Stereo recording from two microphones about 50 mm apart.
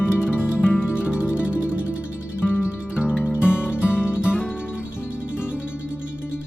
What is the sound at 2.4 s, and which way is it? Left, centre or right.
Music, left.